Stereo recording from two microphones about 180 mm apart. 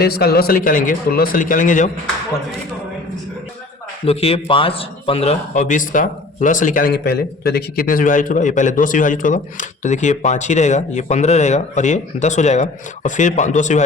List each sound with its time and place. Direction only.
0.0 s speech: 60° left (ahead or behind)
4.0 s speech: 35° left (ahead or behind)